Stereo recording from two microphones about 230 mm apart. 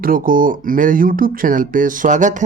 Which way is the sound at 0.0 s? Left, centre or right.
Right.